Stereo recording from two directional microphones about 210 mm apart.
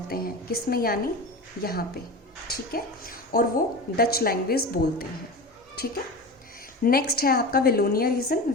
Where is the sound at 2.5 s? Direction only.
45° left (ahead or behind).